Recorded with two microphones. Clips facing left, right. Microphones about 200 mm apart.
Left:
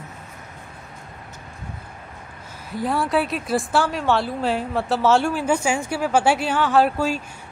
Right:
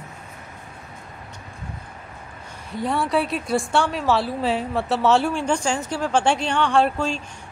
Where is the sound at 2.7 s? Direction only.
Centre (ahead or behind).